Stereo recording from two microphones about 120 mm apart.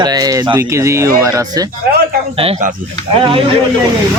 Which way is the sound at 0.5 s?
20° right (ahead or behind).